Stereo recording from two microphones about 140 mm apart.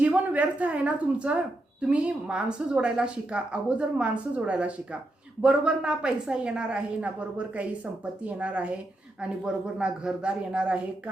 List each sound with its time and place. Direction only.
0.0 s a woman's voice: 10° right (ahead or behind)